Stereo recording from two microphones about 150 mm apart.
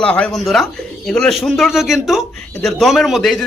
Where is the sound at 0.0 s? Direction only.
5° left (ahead or behind).